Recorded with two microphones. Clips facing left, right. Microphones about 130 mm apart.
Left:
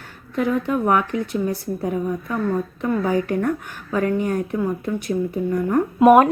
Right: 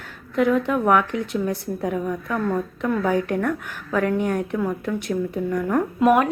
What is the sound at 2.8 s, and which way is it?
A woman's voice, 5° left (ahead or behind).